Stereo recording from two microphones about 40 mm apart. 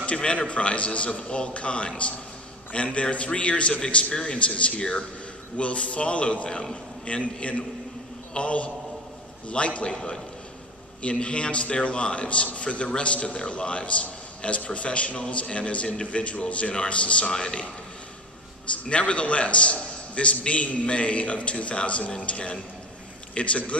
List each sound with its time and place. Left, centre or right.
0.0 s a man's voice: left
9.8 s a man's voice: centre
18.9 s a man's voice: left